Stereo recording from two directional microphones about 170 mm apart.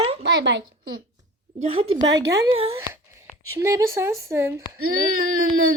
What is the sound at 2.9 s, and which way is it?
Speech, 15° right (ahead or behind).